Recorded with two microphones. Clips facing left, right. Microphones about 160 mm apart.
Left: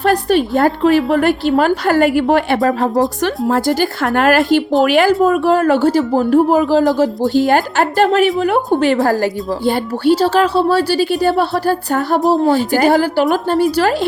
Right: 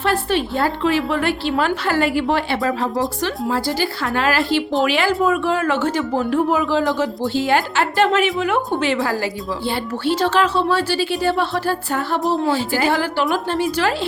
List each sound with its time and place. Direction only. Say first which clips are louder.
0.0 s a woman's voice: left 6 dB; 40° left (ahead or behind)